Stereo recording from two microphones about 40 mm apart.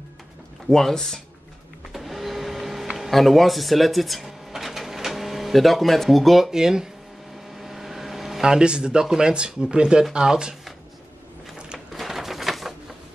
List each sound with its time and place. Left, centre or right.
0.7 s speech: centre
1.9 s a sound: centre
4.5 s cash register: centre
6.5 s speech: centre
7.5 s vehicle: centre
8.5 s speech: right
11.9 s a sound: centre